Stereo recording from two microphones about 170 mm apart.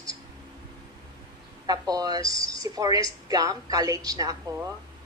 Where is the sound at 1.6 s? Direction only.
25° right (ahead or behind).